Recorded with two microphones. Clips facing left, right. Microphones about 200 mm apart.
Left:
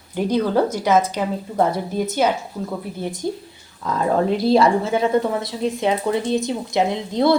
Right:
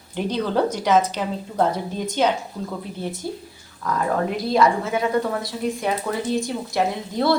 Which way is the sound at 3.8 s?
30° left (ahead or behind).